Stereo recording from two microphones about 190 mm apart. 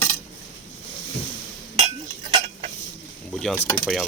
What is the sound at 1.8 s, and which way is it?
Chink, 35° right (ahead or behind).